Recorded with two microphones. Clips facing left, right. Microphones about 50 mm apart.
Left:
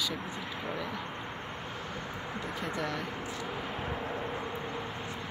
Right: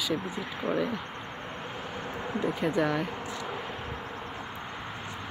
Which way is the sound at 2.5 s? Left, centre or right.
Right.